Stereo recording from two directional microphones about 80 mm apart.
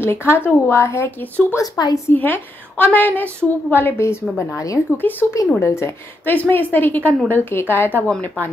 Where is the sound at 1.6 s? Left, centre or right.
Left.